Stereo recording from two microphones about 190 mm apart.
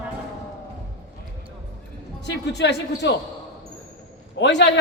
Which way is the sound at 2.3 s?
65° left (ahead or behind).